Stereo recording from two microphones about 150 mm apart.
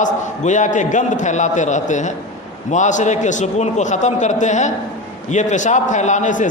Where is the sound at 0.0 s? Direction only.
55° left (ahead or behind).